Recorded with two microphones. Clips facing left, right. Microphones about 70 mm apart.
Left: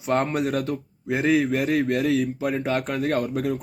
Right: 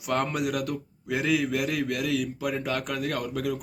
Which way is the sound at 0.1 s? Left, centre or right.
Left.